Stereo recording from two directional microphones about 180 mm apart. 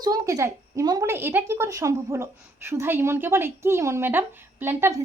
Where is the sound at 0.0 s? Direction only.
20° right (ahead or behind).